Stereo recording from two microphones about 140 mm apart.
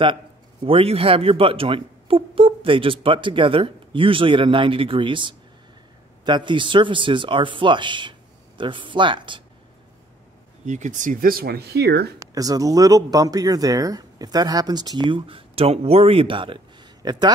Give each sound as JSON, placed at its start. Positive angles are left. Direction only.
{"t": 0.7, "sound": "speech", "side_deg": -45}
{"t": 10.6, "sound": "speech", "side_deg": -60}
{"t": 12.2, "sound": "speech", "side_deg": -25}